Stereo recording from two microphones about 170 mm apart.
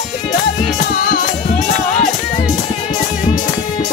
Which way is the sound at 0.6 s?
50° left (ahead or behind).